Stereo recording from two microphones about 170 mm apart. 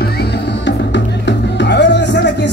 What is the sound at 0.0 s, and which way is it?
Music, 75° left (ahead or behind).